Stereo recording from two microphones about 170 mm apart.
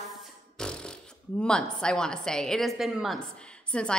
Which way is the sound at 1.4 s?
5° left (ahead or behind).